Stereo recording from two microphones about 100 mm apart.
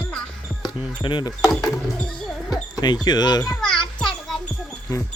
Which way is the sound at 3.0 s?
45° left (ahead or behind).